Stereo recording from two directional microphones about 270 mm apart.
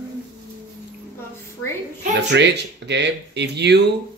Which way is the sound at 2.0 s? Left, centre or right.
Right.